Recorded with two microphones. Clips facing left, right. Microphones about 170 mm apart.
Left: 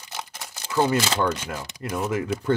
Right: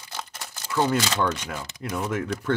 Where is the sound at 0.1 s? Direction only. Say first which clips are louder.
Left 1 dB; 15° left (ahead or behind).